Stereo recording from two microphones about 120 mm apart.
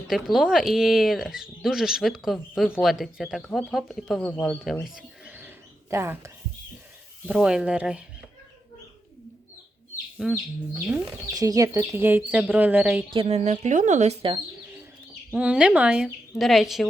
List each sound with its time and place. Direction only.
0.1 s speech: centre (ahead or behind)
4.4 s a sound: centre (ahead or behind); by 6.3 s 20° right (ahead or behind)
7.3 s speech: 5° right (ahead or behind)
10.2 s speech: 5° right (ahead or behind)
11.3 s speech: 30° right (ahead or behind)
11.9 s speech: 15° right (ahead or behind)
13.1 s speech: 60° right (ahead or behind); by 14.2 s 80° right
15.3 s speech: 10° right (ahead or behind)